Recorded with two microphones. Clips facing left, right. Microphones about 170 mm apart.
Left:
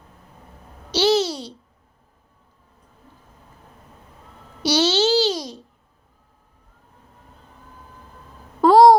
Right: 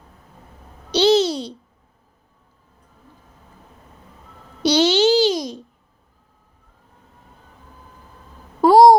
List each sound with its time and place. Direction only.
0.9 s a child's voice: 20° right (ahead or behind)
4.6 s babbling: 15° right (ahead or behind)
8.6 s a sound: 10° right (ahead or behind)